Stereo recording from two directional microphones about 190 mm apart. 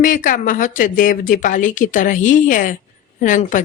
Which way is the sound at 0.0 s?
45° left (ahead or behind).